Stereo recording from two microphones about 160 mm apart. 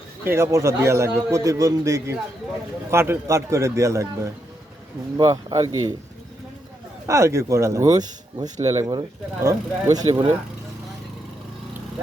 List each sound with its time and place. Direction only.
0.3 s a man's voice: 15° right (ahead or behind)
7.1 s a man's voice: 20° right (ahead or behind)